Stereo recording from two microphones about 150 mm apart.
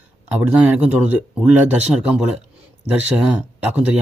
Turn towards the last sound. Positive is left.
turn(degrees=-10)  # may be behind; listen again after turning